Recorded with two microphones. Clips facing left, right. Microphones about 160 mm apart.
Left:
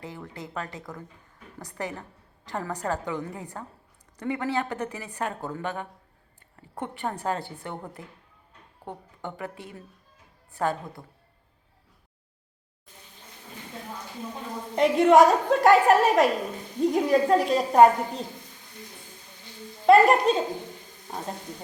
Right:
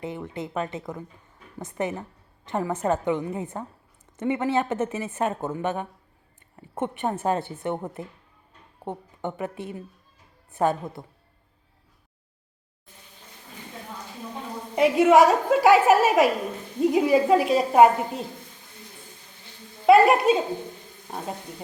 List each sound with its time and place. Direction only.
0.0 s a woman's voice: 20° right (ahead or behind)
14.8 s a woman's voice: 5° right (ahead or behind)
19.8 s a woman's voice: 5° right (ahead or behind)